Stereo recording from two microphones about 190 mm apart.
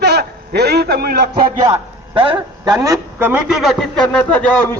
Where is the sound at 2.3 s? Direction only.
20° right (ahead or behind); by 4.2 s 5° left (ahead or behind).